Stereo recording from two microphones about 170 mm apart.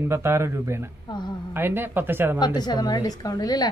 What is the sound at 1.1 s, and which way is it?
Speech, 25° left (ahead or behind).